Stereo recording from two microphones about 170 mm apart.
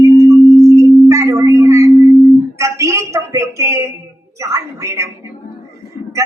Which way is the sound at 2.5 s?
15° right (ahead or behind).